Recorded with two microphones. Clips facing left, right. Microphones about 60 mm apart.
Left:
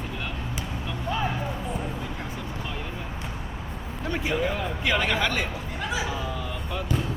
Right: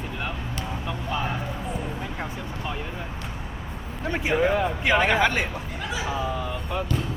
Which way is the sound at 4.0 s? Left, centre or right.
Right.